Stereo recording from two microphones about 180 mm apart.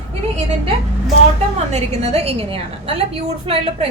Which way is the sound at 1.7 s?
35° right (ahead or behind).